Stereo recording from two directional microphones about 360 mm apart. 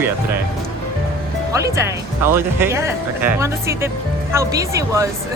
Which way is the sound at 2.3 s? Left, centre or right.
Centre.